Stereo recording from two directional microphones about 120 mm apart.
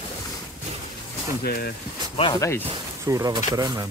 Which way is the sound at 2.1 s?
40° left (ahead or behind).